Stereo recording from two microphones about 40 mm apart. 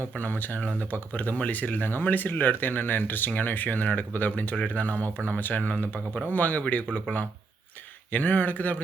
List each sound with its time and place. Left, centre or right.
0.2 s a man's voice: left
8.1 s a man's voice: left